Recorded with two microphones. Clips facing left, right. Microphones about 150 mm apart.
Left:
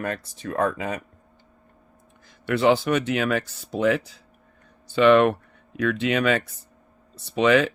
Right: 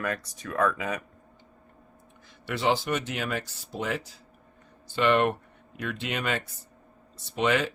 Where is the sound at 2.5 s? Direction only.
60° left (ahead or behind); by 4.0 s 80° left.